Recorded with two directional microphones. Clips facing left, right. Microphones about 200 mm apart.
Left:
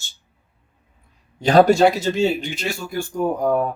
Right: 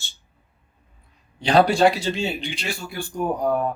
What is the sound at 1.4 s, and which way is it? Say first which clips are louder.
Speech: left 4 dB; 45° left (ahead or behind).